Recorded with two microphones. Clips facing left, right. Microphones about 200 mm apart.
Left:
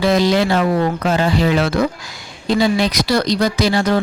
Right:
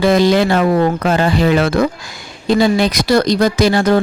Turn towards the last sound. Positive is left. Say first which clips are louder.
# right 4 dB
turn(degrees=-50)  # may be behind; listen again after turning